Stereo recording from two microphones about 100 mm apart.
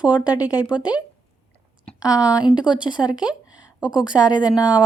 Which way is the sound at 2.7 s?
50° left (ahead or behind).